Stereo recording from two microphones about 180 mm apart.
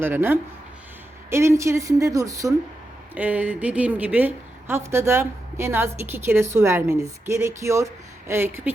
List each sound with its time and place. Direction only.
0.0 s a woman's voice: 10° right (ahead or behind)